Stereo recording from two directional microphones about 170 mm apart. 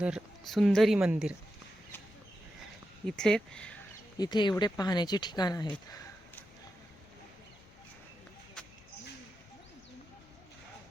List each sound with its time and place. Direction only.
0.0 s speech: centre (ahead or behind)
3.1 s speech: 5° left (ahead or behind)
4.2 s speech: 25° left (ahead or behind)